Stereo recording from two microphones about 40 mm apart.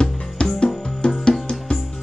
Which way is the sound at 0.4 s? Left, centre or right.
Left.